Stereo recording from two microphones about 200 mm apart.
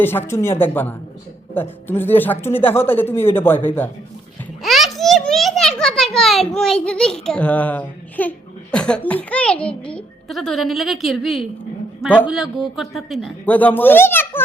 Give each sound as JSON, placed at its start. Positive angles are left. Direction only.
{"t": 0.0, "sound": "speech", "side_deg": 10}
{"t": 4.6, "sound": "a child's voice", "side_deg": 0}